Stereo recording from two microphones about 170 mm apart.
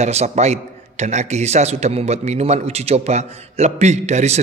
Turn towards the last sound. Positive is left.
turn(degrees=-40)  # may be behind; listen again after turning